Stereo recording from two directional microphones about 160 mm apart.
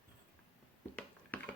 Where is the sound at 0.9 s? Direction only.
10° left (ahead or behind).